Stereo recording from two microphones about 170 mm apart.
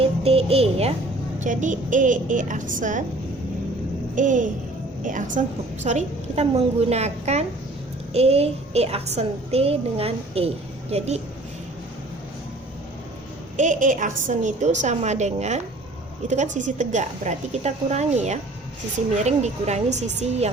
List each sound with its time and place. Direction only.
0.0 s speech: 35° right (ahead or behind)
1.4 s a woman's voice: 50° right (ahead or behind)
4.1 s a woman's voice: 50° right (ahead or behind)
13.6 s a woman's voice: 50° right (ahead or behind)